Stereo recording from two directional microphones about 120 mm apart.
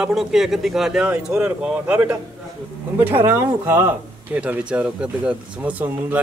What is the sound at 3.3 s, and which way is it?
A man's voice, 20° right (ahead or behind).